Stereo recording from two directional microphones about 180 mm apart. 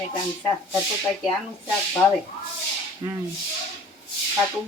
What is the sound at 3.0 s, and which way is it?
Speech, 20° right (ahead or behind).